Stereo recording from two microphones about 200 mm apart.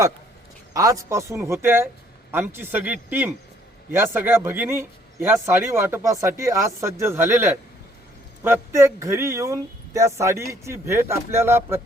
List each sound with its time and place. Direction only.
0.7 s speech: 15° right (ahead or behind)